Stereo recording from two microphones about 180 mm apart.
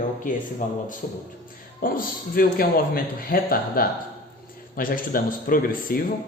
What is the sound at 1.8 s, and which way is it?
Speech, 55° left (ahead or behind).